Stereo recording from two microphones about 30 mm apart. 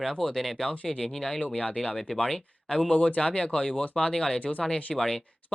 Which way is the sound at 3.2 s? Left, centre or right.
Left.